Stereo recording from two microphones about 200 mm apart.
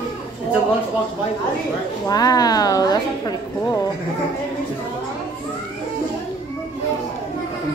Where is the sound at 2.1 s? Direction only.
20° left (ahead or behind).